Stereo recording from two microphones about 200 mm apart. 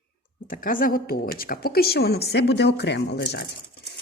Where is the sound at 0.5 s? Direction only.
45° left (ahead or behind).